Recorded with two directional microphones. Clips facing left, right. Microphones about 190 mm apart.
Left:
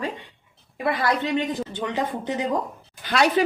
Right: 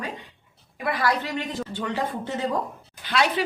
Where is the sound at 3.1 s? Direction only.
45° left (ahead or behind).